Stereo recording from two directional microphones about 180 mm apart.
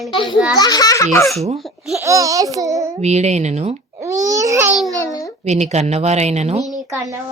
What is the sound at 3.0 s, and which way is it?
Speech, 40° right (ahead or behind).